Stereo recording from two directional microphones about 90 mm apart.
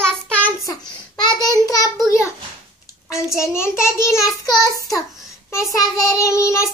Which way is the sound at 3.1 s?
30° left (ahead or behind).